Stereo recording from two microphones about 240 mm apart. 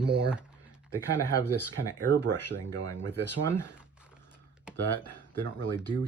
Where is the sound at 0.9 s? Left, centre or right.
Centre.